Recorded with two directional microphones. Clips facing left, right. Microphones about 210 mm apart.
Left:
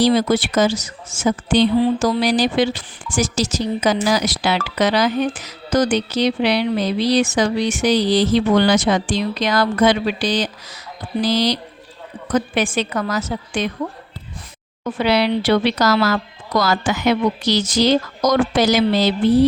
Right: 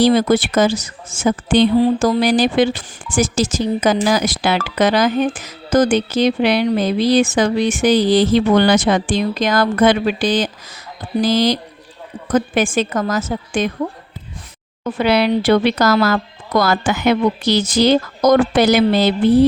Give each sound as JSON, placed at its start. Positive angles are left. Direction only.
{"t": 0.0, "sound": "speech", "side_deg": -55}
{"t": 14.9, "sound": "speech", "side_deg": -50}